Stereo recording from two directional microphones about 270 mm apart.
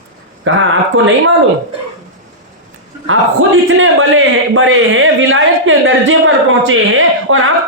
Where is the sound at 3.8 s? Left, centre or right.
Right.